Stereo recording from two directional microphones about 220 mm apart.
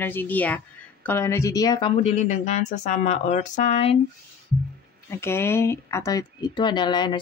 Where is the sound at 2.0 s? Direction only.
35° left (ahead or behind).